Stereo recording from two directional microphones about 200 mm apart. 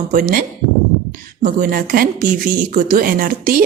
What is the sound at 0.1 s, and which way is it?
A woman's voice, 45° right (ahead or behind).